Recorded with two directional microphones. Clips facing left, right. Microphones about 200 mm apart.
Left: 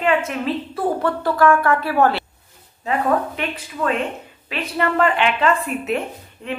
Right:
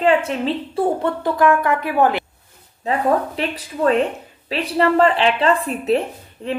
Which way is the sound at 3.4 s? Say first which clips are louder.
Right 3 dB; 35° right (ahead or behind).